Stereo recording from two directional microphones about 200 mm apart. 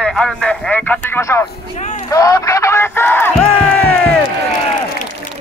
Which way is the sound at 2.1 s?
15° left (ahead or behind).